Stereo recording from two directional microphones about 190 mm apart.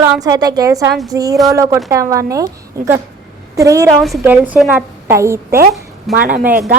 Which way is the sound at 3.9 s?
Centre (ahead or behind).